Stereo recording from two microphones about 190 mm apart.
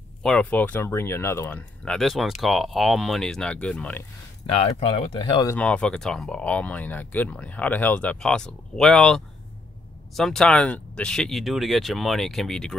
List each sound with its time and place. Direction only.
0.2 s speech: 5° left (ahead or behind)
4.5 s speech: 30° left (ahead or behind)
5.5 s speech: 5° left (ahead or behind)